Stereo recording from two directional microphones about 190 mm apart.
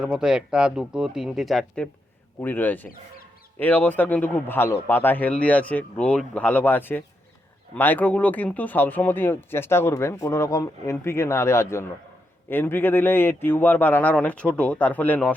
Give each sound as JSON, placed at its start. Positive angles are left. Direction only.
{"t": 0.0, "sound": "speech", "side_deg": -5}